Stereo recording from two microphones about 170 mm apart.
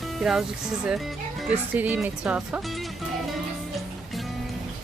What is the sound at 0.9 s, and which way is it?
Speech, centre (ahead or behind).